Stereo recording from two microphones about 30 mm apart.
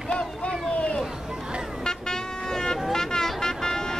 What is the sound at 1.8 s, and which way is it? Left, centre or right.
Vehicle, left.